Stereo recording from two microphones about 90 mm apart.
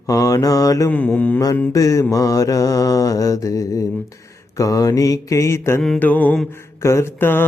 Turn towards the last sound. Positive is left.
turn(degrees=25)  # may be behind; listen again after turning